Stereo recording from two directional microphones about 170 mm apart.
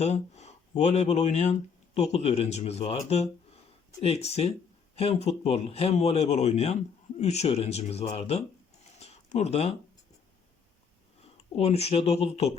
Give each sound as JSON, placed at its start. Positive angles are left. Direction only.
{"t": 0.0, "sound": "speech", "side_deg": 40}
{"t": 9.0, "sound": "a sound", "side_deg": 40}
{"t": 11.5, "sound": "speech", "side_deg": 35}